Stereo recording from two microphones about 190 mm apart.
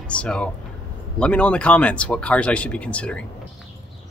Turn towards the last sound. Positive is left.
turn(degrees=5)  # may be behind; listen again after turning